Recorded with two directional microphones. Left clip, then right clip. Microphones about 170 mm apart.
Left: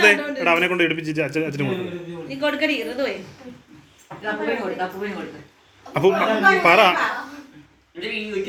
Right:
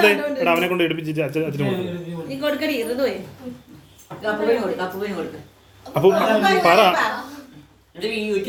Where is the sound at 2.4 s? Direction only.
80° right.